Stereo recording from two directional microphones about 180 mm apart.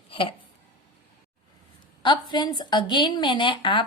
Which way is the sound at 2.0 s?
25° left (ahead or behind).